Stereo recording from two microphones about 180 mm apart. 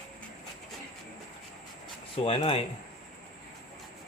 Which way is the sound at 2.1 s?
30° left (ahead or behind).